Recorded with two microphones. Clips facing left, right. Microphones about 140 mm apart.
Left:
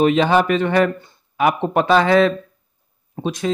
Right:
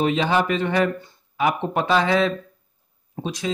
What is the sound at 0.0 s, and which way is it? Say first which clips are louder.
Speech: left 5 dB; 60° left (ahead or behind).